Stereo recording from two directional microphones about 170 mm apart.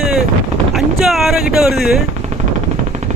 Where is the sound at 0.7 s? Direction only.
Centre (ahead or behind).